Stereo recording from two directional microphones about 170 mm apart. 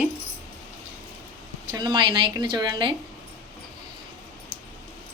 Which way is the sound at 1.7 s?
25° right (ahead or behind).